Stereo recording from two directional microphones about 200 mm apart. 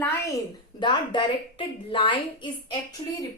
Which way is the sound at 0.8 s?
25° left (ahead or behind).